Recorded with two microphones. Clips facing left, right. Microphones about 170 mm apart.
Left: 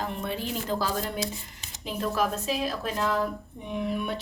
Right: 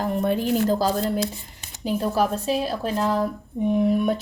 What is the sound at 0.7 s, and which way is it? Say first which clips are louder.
A woman's voice: right 7 dB; 40° right (ahead or behind).